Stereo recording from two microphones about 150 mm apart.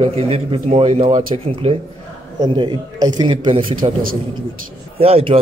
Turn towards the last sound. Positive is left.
turn(degrees=-40)  # may be behind; listen again after turning